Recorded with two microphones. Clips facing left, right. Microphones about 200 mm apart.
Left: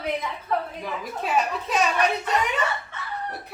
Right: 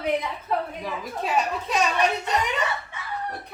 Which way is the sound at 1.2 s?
Centre (ahead or behind).